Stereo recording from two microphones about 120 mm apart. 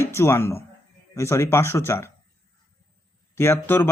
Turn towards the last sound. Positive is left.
turn(degrees=20)  # may be behind; listen again after turning